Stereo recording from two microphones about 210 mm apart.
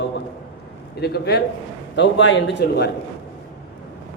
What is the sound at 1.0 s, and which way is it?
A man's voice, 50° left (ahead or behind).